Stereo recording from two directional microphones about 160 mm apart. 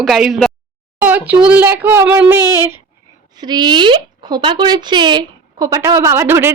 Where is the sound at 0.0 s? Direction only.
Centre (ahead or behind).